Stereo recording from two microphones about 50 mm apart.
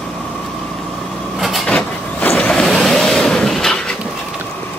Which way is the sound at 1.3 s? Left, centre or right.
Centre.